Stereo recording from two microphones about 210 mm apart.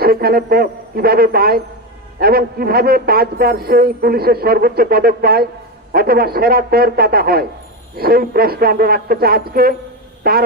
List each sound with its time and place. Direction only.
0.0 s a man's voice: 45° right (ahead or behind)